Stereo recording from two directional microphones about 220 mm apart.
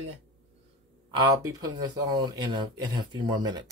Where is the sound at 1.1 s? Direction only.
20° right (ahead or behind).